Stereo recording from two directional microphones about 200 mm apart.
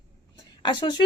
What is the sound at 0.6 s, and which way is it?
Speech, 20° left (ahead or behind).